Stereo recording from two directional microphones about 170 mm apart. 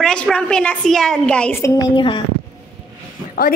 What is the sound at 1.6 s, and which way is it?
Child singing, 20° left (ahead or behind).